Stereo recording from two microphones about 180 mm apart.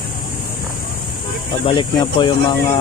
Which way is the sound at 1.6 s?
25° left (ahead or behind).